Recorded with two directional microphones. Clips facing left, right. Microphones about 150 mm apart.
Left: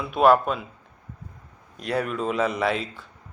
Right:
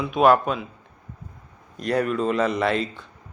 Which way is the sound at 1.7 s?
Centre (ahead or behind).